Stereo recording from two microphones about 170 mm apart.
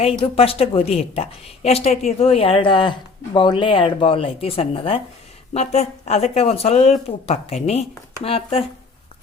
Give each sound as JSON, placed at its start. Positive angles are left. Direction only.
{"t": 0.0, "sound": "a woman's voice", "side_deg": 35}